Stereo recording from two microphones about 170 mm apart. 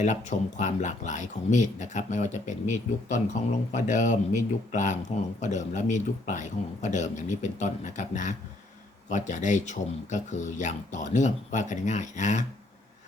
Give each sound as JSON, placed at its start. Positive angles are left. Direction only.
{"t": 0.0, "sound": "speech", "side_deg": 45}